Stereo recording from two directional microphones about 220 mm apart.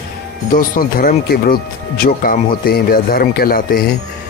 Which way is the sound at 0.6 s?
40° left (ahead or behind).